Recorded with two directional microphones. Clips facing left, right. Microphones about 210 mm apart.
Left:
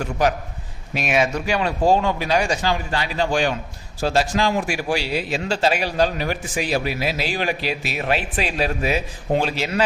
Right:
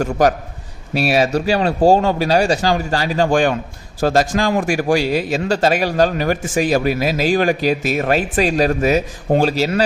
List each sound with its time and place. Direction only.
0.0 s speech: 45° right (ahead or behind)